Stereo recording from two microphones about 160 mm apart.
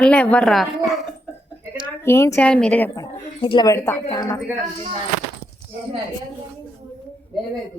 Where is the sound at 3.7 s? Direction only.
15° left (ahead or behind).